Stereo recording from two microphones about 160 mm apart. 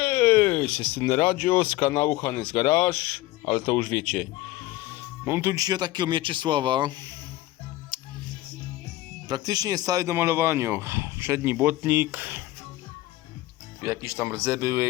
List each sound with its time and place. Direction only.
0.0 s a sound: 10° left (ahead or behind)
1.3 s speech: 15° left (ahead or behind)
4.9 s speech: 15° right (ahead or behind)
7.9 s music: 25° right (ahead or behind)
9.3 s speech: 25° right (ahead or behind)
13.8 s speech: 15° right (ahead or behind)